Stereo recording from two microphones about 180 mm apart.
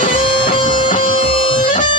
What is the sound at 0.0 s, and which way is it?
Music, 50° left (ahead or behind).